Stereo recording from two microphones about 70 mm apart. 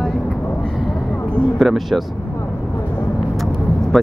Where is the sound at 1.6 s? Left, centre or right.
Centre.